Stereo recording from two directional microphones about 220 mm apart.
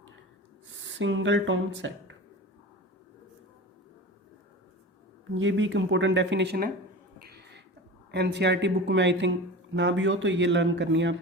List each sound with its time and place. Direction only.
0.7 s speech: 55° right (ahead or behind)
5.3 s speech: 60° right (ahead or behind)
7.2 s a sound: 45° right (ahead or behind)
8.1 s speech: 50° right (ahead or behind)